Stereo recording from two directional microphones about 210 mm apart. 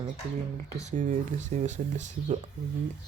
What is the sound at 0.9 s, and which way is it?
Speech, 35° right (ahead or behind).